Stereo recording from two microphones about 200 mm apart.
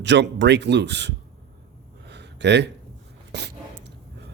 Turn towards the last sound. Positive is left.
turn(degrees=-60)  # may be behind; listen again after turning